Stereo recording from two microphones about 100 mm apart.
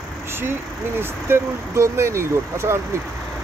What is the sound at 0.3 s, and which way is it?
Speech, 25° right (ahead or behind).